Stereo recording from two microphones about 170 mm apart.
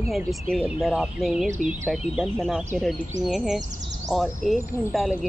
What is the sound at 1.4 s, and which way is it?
Speech, 45° right (ahead or behind).